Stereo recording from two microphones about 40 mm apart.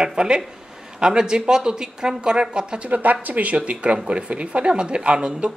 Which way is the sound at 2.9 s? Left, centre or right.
Right.